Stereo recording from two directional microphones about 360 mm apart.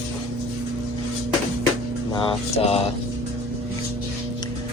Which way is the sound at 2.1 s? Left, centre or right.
Centre.